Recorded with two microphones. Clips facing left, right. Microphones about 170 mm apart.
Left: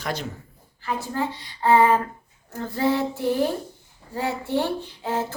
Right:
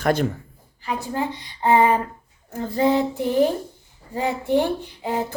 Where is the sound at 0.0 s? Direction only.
55° right (ahead or behind).